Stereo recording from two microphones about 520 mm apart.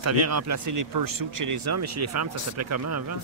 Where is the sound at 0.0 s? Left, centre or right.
Right.